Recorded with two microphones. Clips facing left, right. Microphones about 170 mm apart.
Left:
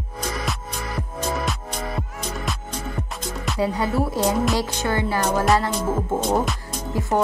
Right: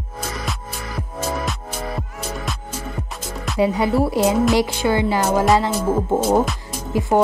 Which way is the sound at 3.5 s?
15° right (ahead or behind).